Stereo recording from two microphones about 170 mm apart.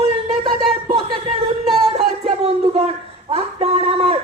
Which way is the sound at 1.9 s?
35° right (ahead or behind).